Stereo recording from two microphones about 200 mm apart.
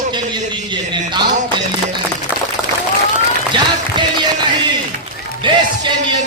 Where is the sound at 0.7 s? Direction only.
20° right (ahead or behind).